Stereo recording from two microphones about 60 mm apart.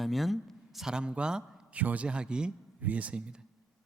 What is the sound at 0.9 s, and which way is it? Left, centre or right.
A man's voice, centre.